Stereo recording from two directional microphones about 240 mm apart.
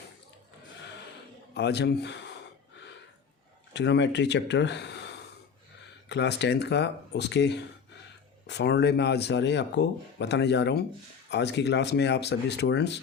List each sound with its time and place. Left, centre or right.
1.5 s speech: left
3.8 s speech: left